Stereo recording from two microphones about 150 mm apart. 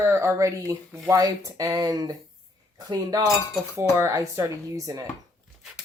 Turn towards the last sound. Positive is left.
turn(degrees=-25)  # may be behind; listen again after turning